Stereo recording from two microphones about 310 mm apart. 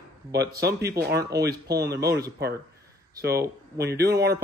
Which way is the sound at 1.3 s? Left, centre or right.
Right.